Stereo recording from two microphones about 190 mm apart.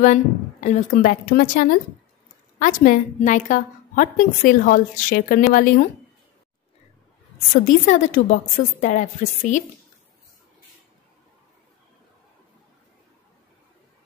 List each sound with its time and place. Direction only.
0.0 s a woman's voice: 40° left (ahead or behind)
7.6 s a woman's voice: 45° left (ahead or behind)